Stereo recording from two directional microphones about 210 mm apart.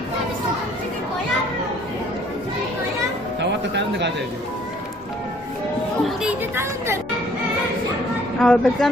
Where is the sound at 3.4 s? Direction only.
55° right (ahead or behind).